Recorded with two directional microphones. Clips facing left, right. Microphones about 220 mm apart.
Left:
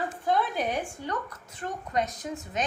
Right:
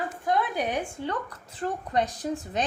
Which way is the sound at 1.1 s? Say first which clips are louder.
Right 2 dB; 30° right (ahead or behind).